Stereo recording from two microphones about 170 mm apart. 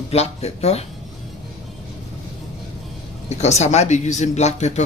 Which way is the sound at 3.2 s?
40° left (ahead or behind).